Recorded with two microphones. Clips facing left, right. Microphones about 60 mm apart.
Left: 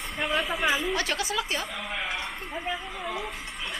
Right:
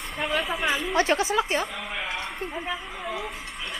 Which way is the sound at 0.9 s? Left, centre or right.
Right.